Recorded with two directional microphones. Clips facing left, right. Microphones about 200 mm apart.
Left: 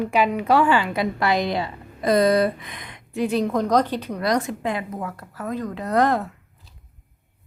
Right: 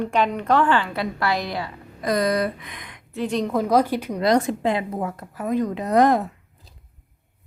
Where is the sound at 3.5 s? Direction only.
5° right (ahead or behind).